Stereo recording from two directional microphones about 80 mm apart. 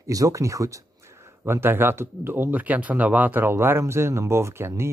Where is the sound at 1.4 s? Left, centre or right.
Right.